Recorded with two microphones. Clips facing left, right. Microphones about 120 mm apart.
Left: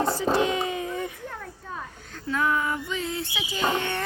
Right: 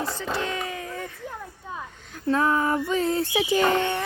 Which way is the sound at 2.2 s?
30° right (ahead or behind).